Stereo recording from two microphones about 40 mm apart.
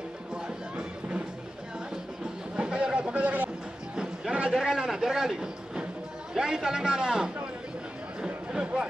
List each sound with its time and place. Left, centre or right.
0.3 s music: right
2.5 s a sound: right
4.6 s a man's voice: centre
8.5 s speech: right